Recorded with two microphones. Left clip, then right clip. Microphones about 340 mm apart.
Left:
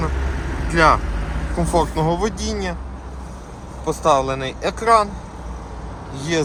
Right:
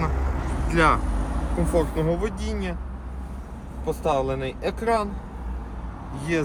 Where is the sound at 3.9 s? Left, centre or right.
Left.